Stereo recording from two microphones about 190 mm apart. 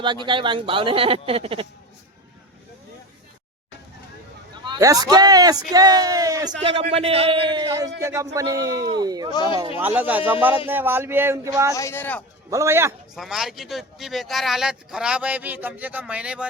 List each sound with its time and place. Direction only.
0.0 s a man's voice: 25° right (ahead or behind)
4.6 s a man's voice: 20° right (ahead or behind)
6.7 s a man's voice: 30° right (ahead or behind)
9.3 s speech: 25° left (ahead or behind)
9.7 s speech: 10° right (ahead or behind)
11.7 s speech: 15° left (ahead or behind)
12.5 s speech: 15° right (ahead or behind)
13.1 s speech: centre (ahead or behind)